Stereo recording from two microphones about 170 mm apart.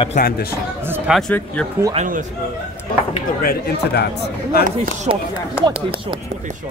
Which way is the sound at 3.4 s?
70° left (ahead or behind).